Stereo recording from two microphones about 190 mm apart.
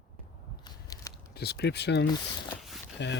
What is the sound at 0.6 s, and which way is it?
Biting, 20° left (ahead or behind).